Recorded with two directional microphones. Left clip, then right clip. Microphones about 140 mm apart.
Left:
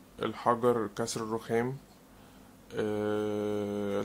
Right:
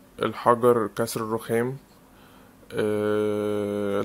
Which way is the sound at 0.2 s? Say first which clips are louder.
Right 8 dB; 25° right (ahead or behind).